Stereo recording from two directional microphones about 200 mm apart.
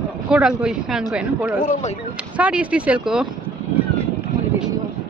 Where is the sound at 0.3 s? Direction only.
5° right (ahead or behind).